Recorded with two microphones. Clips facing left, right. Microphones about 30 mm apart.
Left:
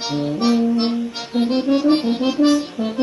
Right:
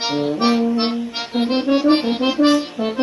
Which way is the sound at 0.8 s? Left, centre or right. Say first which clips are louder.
Even; centre.